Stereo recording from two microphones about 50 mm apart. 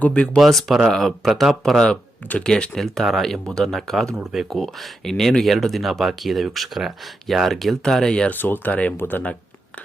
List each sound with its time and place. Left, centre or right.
0.0 s speech: left
0.3 s speech: centre
2.4 s speech: centre
2.7 s speech: centre
3.4 s speech: centre
3.7 s speech: centre
4.2 s speech: centre
8.3 s speech: left